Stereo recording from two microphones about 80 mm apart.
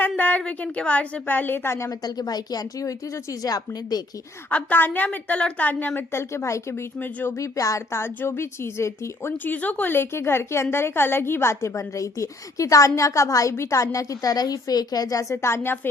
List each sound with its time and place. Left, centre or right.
0.2 s a woman's voice: centre
1.9 s speech: left
4.4 s a woman's voice: left
5.9 s a woman's voice: left